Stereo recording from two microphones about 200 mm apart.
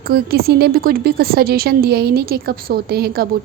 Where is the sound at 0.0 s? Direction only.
50° right (ahead or behind).